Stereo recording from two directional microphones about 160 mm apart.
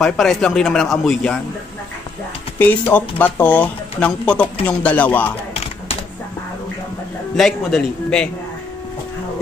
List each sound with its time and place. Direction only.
0.0 s a man's voice: 5° left (ahead or behind)
2.6 s speech: 10° left (ahead or behind)
7.3 s a man's voice: 5° left (ahead or behind)